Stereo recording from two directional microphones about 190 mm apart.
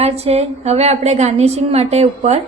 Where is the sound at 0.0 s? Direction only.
35° right (ahead or behind).